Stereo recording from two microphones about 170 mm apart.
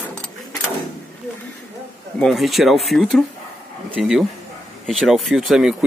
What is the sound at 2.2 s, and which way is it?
Speech, centre (ahead or behind).